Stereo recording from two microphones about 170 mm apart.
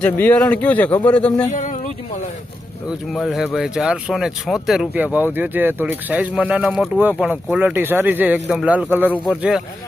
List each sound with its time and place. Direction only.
0.0 s a man's voice: 10° left (ahead or behind)
1.5 s speech: 50° left (ahead or behind)
3.1 s speech: centre (ahead or behind)